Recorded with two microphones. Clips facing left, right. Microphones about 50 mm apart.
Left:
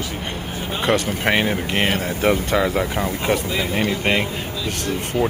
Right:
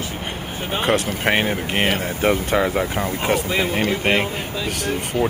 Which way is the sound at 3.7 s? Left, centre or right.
Centre.